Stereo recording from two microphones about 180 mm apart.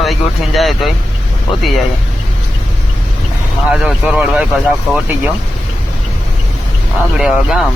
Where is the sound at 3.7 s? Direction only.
5° right (ahead or behind).